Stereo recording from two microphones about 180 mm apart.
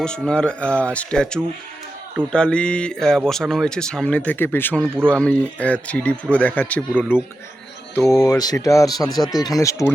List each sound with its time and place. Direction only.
0.0 s speech: 5° left (ahead or behind)
8.1 s speech: 20° left (ahead or behind)